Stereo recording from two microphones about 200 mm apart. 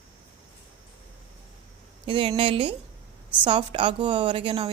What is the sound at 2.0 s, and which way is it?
A woman's voice, 25° right (ahead or behind).